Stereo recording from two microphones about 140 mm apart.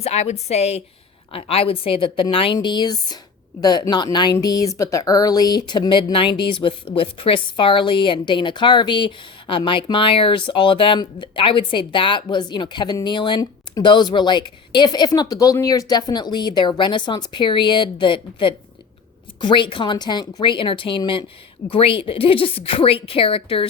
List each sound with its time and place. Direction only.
0.0 s a woman's voice: 50° left (ahead or behind)